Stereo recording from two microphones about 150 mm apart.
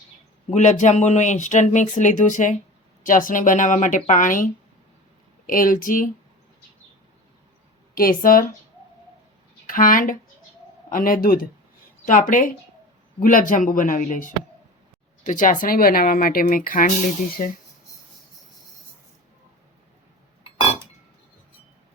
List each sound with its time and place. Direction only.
0.5 s a woman's voice: 50° left (ahead or behind)
5.5 s speech: 65° left (ahead or behind)
7.9 s speech: 70° left (ahead or behind)
9.6 s speech: 65° left (ahead or behind)
12.0 s a woman's voice: 55° left (ahead or behind)
17.4 s a woman's voice: 55° left (ahead or behind)